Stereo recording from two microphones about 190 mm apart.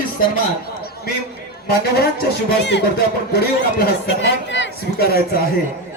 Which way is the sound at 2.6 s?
65° left (ahead or behind).